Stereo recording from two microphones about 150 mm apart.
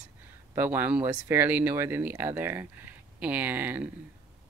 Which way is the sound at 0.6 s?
15° right (ahead or behind).